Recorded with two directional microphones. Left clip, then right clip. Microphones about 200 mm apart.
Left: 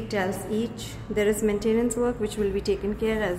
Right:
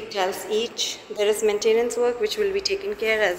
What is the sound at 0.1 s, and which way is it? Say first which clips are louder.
A woman's voice: right 4 dB; 5° right (ahead or behind).